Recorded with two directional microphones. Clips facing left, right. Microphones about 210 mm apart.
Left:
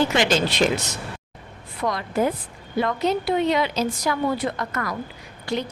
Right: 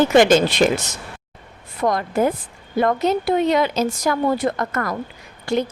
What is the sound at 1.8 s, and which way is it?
A woman's voice, 50° right (ahead or behind).